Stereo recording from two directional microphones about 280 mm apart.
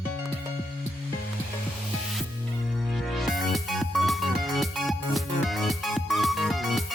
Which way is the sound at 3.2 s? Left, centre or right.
Centre.